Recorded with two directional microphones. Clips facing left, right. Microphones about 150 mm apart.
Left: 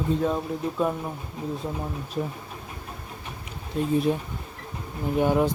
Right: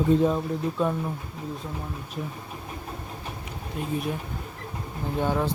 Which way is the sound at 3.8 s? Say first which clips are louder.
Left 6 dB; 30° left (ahead or behind).